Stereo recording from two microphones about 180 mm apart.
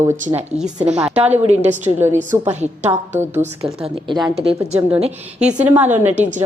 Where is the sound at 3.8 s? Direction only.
25° right (ahead or behind).